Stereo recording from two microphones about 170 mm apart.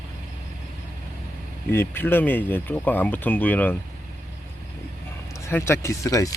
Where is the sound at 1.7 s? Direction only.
15° left (ahead or behind).